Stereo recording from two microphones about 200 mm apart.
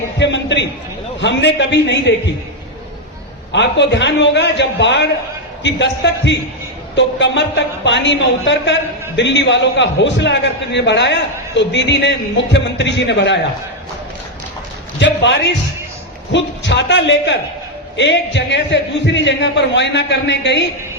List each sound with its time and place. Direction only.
0.2 s a woman's voice: 60° left (ahead or behind)
3.5 s a woman's voice: 65° left (ahead or behind)
14.9 s a woman's voice: 65° left (ahead or behind)